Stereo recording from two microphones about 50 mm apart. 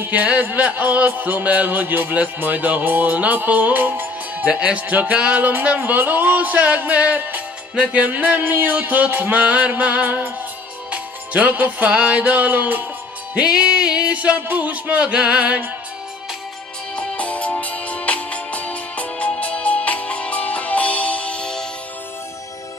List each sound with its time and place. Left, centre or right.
0.0 s music: right
4.5 s music: right
4.8 s music: right
5.1 s music: right
8.1 s music: right
9.4 s music: right
13.3 s music: centre
16.9 s music: left